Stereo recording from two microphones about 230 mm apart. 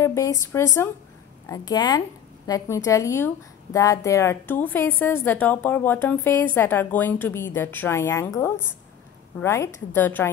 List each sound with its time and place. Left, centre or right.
0.0 s a woman's voice: centre